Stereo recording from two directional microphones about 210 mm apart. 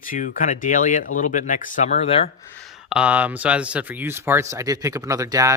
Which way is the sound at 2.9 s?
5° right (ahead or behind).